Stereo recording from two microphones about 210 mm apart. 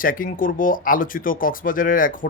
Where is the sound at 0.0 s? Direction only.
40° left (ahead or behind).